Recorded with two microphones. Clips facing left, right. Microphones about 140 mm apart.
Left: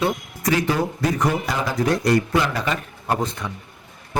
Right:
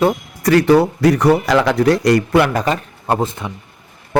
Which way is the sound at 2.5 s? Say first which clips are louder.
Right 7 dB; 45° right (ahead or behind).